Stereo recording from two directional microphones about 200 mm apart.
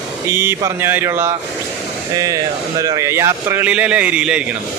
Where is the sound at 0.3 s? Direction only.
10° right (ahead or behind).